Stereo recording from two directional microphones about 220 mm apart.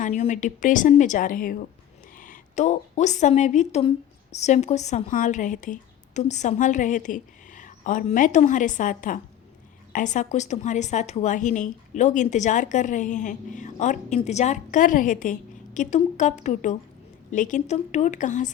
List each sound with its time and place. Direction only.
0.0 s a woman's voice: 35° left (ahead or behind)